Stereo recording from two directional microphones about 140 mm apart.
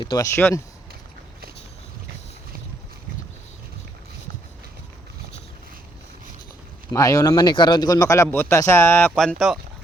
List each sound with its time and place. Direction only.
0.0 s speech: 30° left (ahead or behind)
0.3 s speech: 15° left (ahead or behind)
6.9 s speech: 25° left (ahead or behind)
9.4 s speech: centre (ahead or behind)